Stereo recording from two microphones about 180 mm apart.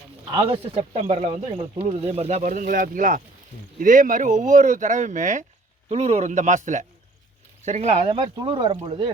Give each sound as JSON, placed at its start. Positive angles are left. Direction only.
{"t": 0.3, "sound": "speech", "side_deg": -30}
{"t": 8.0, "sound": "speech", "side_deg": -25}